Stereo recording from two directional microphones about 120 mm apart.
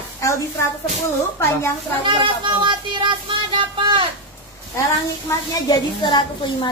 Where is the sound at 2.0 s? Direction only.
40° right (ahead or behind).